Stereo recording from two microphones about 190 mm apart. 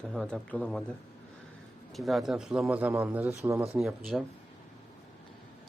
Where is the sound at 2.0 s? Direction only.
Centre (ahead or behind).